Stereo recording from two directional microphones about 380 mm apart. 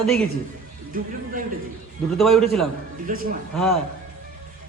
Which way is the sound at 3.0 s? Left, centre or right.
Right.